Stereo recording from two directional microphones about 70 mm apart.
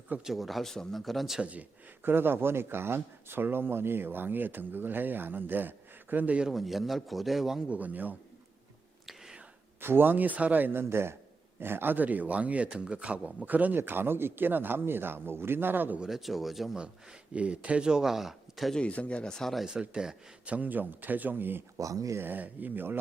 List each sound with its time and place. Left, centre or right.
0.3 s speech: centre
1.4 s speech: centre
2.0 s speech: right
6.5 s speech: centre
7.7 s speech: right
9.0 s whispering: centre
9.8 s a man's voice: right
16.0 s speech: centre
18.7 s speech: centre
19.6 s speech: centre; by 21.6 s right
21.8 s speech: right
22.2 s speech: right